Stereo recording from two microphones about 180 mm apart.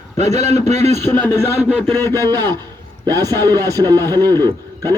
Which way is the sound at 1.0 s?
10° left (ahead or behind).